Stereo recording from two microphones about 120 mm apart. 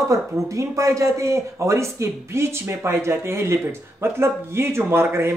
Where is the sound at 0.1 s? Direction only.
25° right (ahead or behind).